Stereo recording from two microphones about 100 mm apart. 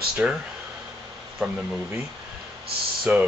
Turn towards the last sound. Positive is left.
turn(degrees=-15)  # may be behind; listen again after turning